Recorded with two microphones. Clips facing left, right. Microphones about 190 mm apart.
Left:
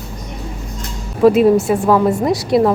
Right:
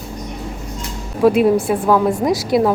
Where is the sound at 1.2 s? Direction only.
Centre (ahead or behind).